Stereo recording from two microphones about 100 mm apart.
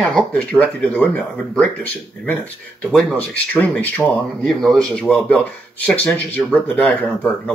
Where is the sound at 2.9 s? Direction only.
5° right (ahead or behind).